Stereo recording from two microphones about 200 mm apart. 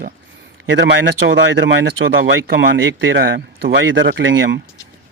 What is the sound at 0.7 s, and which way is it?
Speech, 65° right (ahead or behind).